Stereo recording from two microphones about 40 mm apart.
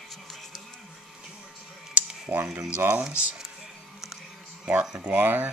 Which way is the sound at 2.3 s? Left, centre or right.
Right.